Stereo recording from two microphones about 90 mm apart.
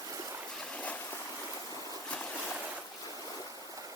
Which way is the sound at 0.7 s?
15° left (ahead or behind).